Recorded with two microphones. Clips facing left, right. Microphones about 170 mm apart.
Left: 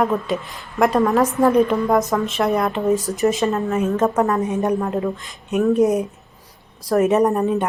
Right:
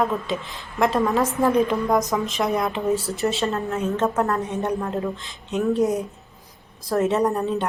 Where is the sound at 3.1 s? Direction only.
15° left (ahead or behind).